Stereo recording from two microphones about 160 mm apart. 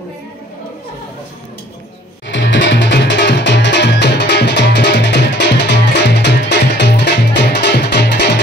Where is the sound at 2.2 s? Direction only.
90° left.